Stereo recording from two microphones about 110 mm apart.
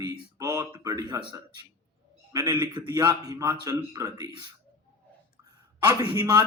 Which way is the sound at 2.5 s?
45° right (ahead or behind).